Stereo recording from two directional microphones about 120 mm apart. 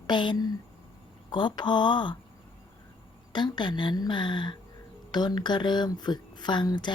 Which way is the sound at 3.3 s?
40° left (ahead or behind).